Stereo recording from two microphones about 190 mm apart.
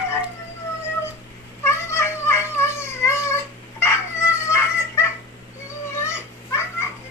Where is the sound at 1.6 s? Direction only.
15° left (ahead or behind).